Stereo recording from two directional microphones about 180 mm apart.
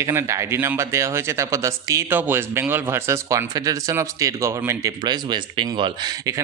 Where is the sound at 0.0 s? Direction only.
15° right (ahead or behind).